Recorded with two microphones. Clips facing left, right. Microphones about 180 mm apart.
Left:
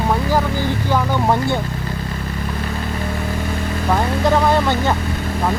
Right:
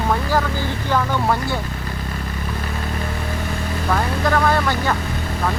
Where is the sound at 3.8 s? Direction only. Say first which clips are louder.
Left 3 dB; 20° left (ahead or behind).